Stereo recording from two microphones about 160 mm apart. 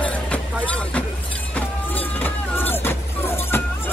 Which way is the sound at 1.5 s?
10° left (ahead or behind).